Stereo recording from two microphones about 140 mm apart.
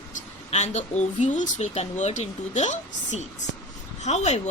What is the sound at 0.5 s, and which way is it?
A woman's voice, 55° left (ahead or behind).